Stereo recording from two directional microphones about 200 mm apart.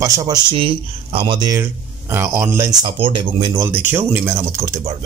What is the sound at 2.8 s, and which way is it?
Speech, 25° right (ahead or behind).